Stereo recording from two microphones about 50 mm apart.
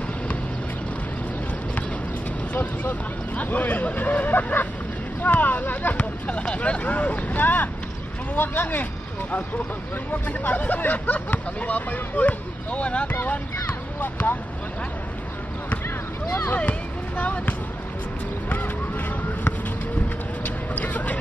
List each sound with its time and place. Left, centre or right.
2.5 s speech: left
10.2 s speech: left
13.1 s speech: left
16.3 s speech: left
17.2 s speech: left
18.5 s a sound: left
20.4 s vehicle: left